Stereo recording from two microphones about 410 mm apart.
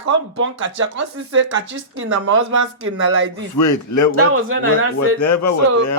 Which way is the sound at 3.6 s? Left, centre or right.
Left.